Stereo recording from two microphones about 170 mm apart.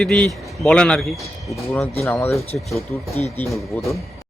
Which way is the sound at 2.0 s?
15° left (ahead or behind).